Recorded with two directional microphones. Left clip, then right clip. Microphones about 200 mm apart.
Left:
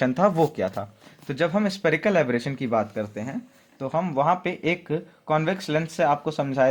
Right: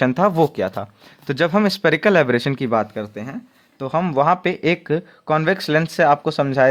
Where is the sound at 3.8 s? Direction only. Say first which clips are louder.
Right 5 dB; 45° right (ahead or behind).